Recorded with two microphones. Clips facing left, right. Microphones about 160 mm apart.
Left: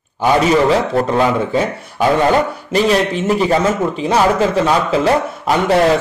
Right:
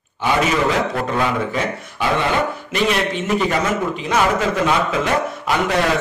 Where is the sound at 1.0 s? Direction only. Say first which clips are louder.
Left 6 dB; 35° left (ahead or behind).